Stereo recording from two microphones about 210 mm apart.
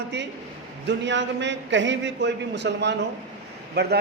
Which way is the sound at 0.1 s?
55° right (ahead or behind).